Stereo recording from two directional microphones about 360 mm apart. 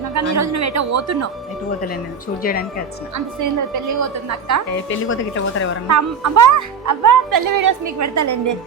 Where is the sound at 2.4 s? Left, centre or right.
Left.